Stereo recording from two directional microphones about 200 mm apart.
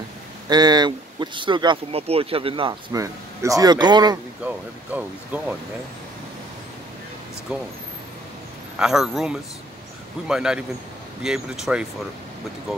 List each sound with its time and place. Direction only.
0.5 s speech: 20° right (ahead or behind)
4.5 s speech: 5° right (ahead or behind)
8.7 s a man's voice: centre (ahead or behind)